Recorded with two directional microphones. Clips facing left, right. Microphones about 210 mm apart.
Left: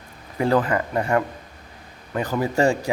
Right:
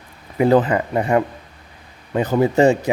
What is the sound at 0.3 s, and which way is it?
A man's voice, 20° right (ahead or behind).